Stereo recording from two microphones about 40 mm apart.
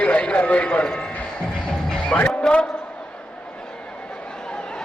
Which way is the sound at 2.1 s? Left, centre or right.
Left.